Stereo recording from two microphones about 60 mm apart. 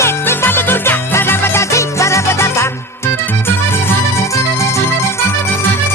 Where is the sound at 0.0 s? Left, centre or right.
Left.